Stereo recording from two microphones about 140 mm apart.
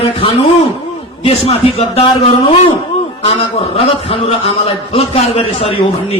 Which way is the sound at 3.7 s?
45° left (ahead or behind).